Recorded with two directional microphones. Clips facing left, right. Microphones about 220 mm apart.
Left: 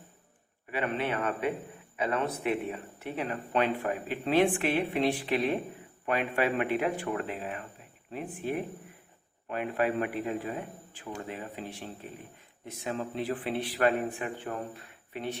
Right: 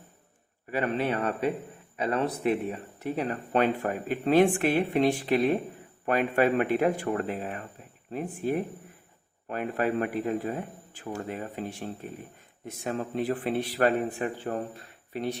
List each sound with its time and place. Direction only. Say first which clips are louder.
0.7 s speech: right 3 dB; 40° right (ahead or behind)
9.5 s speech: right 1 dB; 40° right (ahead or behind)